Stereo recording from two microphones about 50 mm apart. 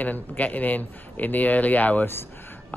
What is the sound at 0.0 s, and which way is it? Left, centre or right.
Speech, left.